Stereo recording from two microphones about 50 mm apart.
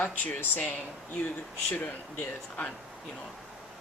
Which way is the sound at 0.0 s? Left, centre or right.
Left.